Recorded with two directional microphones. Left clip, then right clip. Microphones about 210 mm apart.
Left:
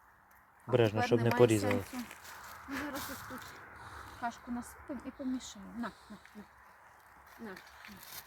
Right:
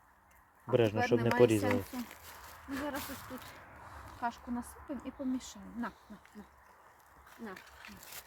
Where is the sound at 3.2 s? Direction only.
60° right (ahead or behind).